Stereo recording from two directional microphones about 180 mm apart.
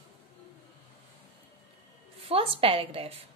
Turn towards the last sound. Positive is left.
turn(degrees=-30)  # may be behind; listen again after turning